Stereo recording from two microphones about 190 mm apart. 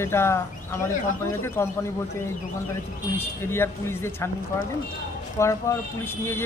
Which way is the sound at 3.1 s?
10° left (ahead or behind).